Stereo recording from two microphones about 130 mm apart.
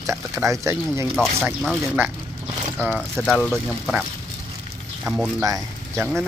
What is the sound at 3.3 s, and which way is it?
Speech, 5° left (ahead or behind).